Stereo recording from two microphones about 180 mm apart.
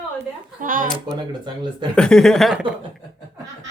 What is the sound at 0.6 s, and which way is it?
Speech, 50° right (ahead or behind).